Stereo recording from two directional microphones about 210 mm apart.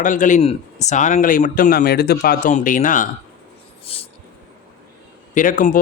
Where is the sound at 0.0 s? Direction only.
40° left (ahead or behind).